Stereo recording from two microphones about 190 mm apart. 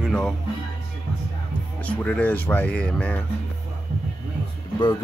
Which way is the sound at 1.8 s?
5° left (ahead or behind).